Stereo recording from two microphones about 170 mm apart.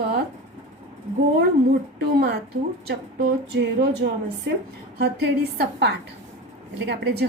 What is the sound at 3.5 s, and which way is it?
A woman's voice, 80° right.